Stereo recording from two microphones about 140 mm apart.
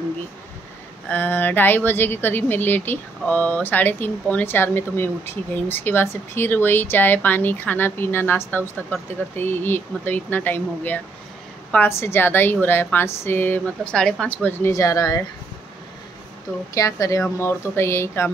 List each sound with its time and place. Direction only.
1.0 s a woman's voice: 15° left (ahead or behind)
16.7 s speech: 25° left (ahead or behind)